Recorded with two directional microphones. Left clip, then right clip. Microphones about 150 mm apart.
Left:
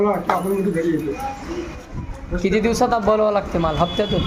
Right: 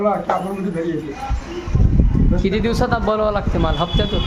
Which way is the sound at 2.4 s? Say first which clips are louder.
Left 3 dB; 5° right (ahead or behind).